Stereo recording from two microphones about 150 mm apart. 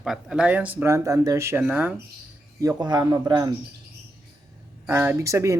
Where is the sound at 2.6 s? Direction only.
25° right (ahead or behind).